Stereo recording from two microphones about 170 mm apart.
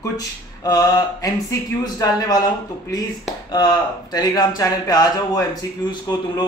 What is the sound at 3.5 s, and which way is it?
Speech, 25° left (ahead or behind).